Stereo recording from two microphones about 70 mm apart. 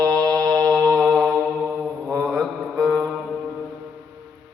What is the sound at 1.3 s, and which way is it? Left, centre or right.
Mantra, right.